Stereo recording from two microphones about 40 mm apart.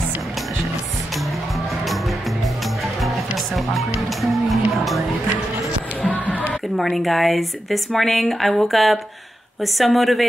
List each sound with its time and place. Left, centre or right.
3.5 s music: centre
6.0 s music: left
6.8 s speech: centre